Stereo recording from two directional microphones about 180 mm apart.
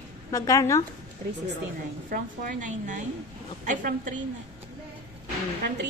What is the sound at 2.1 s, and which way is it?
A woman's voice, 45° right (ahead or behind).